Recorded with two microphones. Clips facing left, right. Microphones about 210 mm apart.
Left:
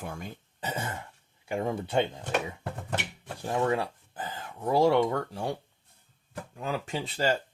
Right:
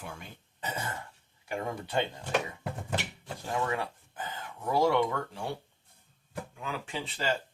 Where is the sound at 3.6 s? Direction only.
30° left (ahead or behind).